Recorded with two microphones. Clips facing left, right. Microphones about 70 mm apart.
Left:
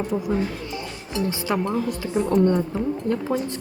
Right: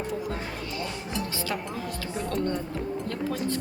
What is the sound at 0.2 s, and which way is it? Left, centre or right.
A woman's voice, left.